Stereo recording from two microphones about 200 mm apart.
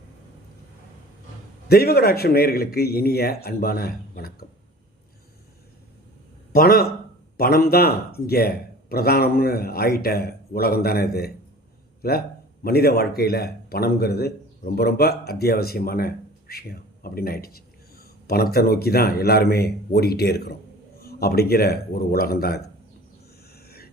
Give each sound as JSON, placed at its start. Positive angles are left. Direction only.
{"t": 1.6, "sound": "speech", "side_deg": 50}
{"t": 6.5, "sound": "a man's voice", "side_deg": 50}
{"t": 23.6, "sound": "a sound", "side_deg": 50}